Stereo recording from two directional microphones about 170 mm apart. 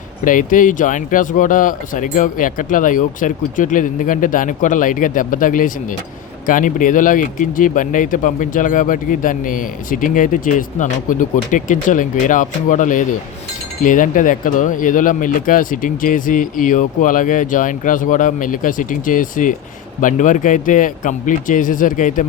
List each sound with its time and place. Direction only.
0.3 s speech: 50° left (ahead or behind)